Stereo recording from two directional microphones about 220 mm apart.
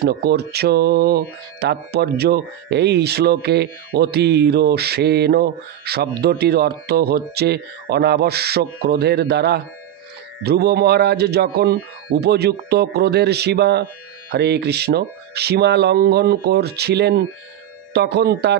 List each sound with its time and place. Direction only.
0.0 s speech: 45° right (ahead or behind)